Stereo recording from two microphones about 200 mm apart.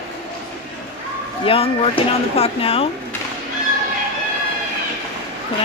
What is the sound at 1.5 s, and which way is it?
Speech, 30° left (ahead or behind).